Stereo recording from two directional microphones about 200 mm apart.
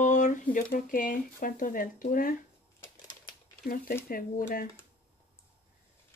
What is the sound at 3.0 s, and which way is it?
Typewriter, 20° left (ahead or behind).